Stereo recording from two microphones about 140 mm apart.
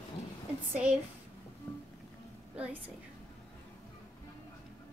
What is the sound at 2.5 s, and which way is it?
Speech, 10° right (ahead or behind).